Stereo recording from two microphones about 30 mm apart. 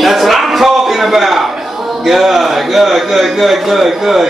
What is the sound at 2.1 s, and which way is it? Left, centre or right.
A man's voice, centre.